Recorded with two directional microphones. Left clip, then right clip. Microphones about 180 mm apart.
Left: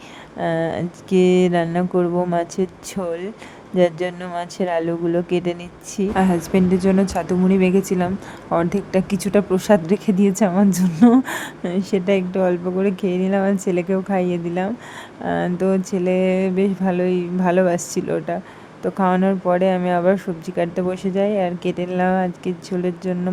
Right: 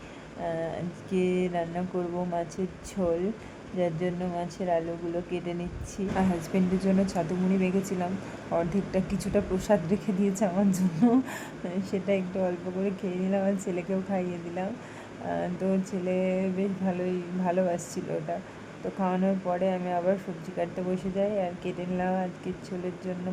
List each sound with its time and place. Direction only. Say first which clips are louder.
0.4 s speech: left 10 dB; 35° left (ahead or behind)
3.8 s speech: left 11 dB; 40° left (ahead or behind)
6.1 s a woman's voice: left 10 dB; 25° left (ahead or behind)